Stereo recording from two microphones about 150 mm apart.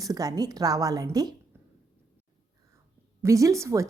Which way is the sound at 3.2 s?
20° right (ahead or behind).